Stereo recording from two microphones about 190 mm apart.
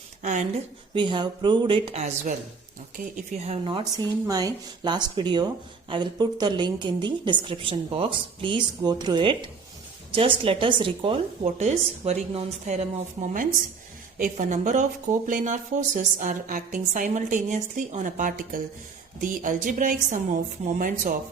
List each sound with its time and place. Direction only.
0.2 s a woman's voice: 40° right (ahead or behind)
0.9 s a woman's voice: 25° right (ahead or behind)
3.4 s a woman's voice: 30° right (ahead or behind)